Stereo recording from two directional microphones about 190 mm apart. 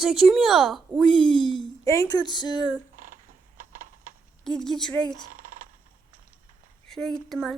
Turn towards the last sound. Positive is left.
turn(degrees=0)  # may be behind; listen again after turning